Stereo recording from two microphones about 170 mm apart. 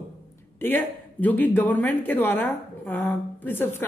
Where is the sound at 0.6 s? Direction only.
10° left (ahead or behind).